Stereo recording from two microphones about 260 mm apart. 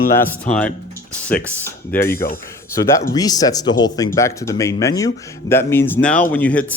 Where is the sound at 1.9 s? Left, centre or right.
Left.